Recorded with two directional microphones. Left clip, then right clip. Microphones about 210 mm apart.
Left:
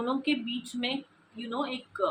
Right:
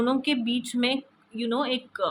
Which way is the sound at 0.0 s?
55° right (ahead or behind).